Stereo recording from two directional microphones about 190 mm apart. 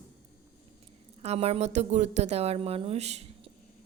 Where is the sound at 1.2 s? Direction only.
30° right (ahead or behind).